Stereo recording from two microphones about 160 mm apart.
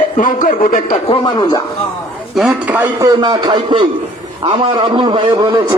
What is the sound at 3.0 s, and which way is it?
A man's voice, 25° right (ahead or behind).